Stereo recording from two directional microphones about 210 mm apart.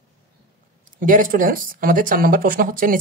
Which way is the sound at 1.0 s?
40° right (ahead or behind).